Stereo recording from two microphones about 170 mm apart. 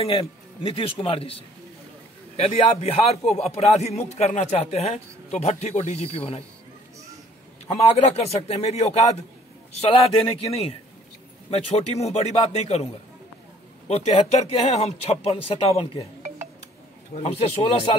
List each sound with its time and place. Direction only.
0.0 s a man's voice: 35° left (ahead or behind)
7.7 s a man's voice: 40° left (ahead or behind)
13.8 s a man's voice: 40° left (ahead or behind)
17.1 s a man's voice: 35° left (ahead or behind)